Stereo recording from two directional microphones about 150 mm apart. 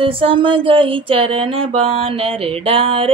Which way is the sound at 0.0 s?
35° right (ahead or behind).